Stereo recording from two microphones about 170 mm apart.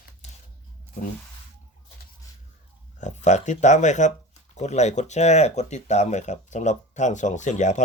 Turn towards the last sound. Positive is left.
turn(degrees=45)  # may be behind; listen again after turning